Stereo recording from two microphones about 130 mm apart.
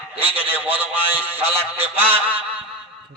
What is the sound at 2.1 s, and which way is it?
Speech, 45° right (ahead or behind).